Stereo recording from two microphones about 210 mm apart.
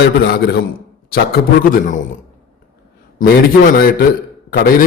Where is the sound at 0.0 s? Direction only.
50° left (ahead or behind).